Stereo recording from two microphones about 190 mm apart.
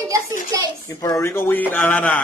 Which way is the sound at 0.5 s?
15° right (ahead or behind).